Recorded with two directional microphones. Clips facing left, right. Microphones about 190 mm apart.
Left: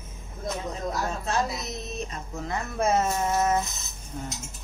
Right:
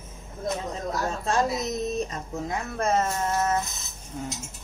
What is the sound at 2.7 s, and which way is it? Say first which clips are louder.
Music: left 1 dB; 5° left (ahead or behind).